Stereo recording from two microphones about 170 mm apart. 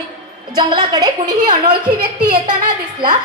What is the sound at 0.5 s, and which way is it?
A woman's voice, 25° right (ahead or behind).